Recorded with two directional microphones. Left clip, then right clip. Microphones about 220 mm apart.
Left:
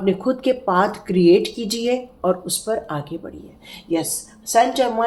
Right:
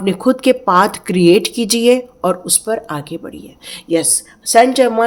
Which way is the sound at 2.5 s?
30° right (ahead or behind).